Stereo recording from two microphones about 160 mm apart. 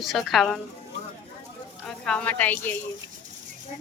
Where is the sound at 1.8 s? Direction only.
5° left (ahead or behind).